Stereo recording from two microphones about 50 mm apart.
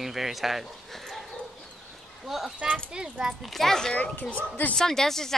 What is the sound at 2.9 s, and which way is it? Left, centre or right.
Speech, centre.